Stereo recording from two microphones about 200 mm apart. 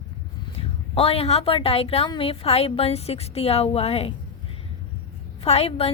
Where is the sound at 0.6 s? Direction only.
25° left (ahead or behind).